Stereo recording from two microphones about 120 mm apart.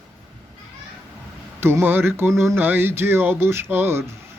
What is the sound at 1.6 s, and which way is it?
Speech, 20° right (ahead or behind).